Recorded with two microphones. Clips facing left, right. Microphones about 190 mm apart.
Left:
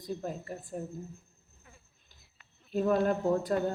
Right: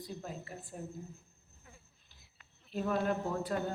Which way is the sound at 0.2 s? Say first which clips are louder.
Left 6 dB; 45° left (ahead or behind).